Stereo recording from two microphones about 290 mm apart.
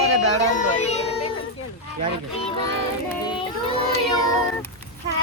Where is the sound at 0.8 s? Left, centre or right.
Left.